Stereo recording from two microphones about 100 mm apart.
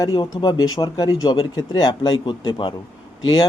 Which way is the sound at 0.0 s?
45° left (ahead or behind).